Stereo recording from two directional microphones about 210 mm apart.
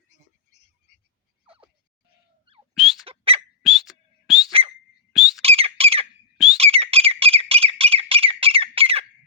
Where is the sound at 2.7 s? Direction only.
Centre (ahead or behind).